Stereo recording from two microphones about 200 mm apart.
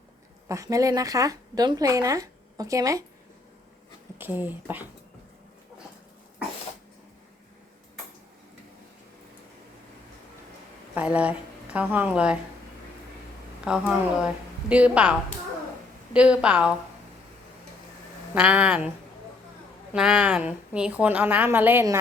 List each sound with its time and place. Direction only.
0.4 s a woman's voice: 15° right (ahead or behind)
4.2 s a woman's voice: 10° right (ahead or behind)
10.9 s a woman's voice: 5° right (ahead or behind)
13.7 s a woman's voice: 5° right (ahead or behind)
16.1 s a woman's voice: 5° right (ahead or behind)
18.3 s a woman's voice: 5° right (ahead or behind)
19.9 s a woman's voice: 5° right (ahead or behind)